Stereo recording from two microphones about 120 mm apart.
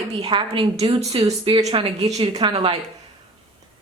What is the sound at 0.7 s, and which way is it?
Speech, 60° right (ahead or behind).